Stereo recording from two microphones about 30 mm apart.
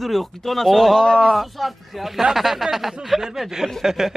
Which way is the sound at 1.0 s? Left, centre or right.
Left.